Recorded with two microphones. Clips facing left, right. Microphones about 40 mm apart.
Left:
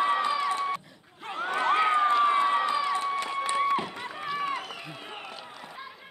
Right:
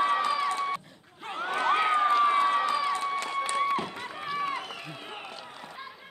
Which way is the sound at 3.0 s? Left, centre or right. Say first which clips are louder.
Left 1 dB; centre.